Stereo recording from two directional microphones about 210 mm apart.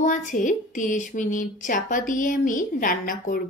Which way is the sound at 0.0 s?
35° left (ahead or behind).